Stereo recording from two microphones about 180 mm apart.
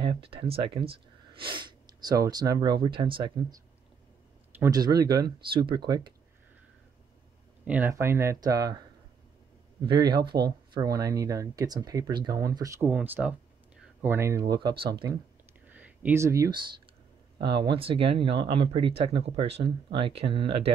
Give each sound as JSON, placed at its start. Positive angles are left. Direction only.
{"t": 0.0, "sound": "speech", "side_deg": -30}
{"t": 4.6, "sound": "speech", "side_deg": -20}
{"t": 7.6, "sound": "speech", "side_deg": -10}
{"t": 14.5, "sound": "speech", "side_deg": -25}
{"t": 15.7, "sound": "a sound", "side_deg": -10}
{"t": 17.5, "sound": "speech", "side_deg": -25}